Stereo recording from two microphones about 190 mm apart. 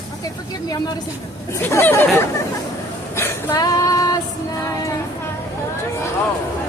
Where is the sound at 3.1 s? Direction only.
15° left (ahead or behind).